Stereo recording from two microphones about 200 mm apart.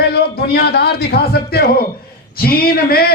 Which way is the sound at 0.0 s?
55° left (ahead or behind).